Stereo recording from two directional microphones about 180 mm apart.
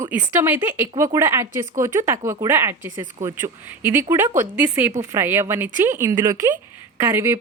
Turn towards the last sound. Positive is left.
turn(degrees=-15)  # may be behind; listen again after turning